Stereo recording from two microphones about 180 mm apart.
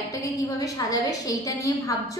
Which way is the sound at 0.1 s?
20° left (ahead or behind).